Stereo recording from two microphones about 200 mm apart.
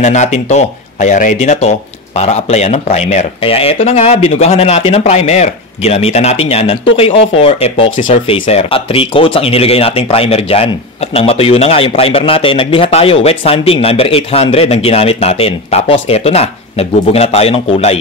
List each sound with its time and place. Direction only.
0.0 s speech: 35° left (ahead or behind)